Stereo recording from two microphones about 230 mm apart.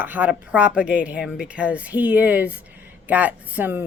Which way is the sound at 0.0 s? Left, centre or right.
Centre.